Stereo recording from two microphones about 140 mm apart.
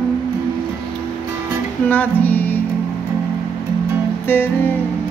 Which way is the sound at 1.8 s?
10° left (ahead or behind).